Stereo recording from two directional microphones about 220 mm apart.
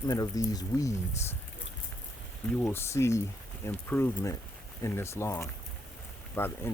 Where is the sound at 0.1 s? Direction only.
15° left (ahead or behind).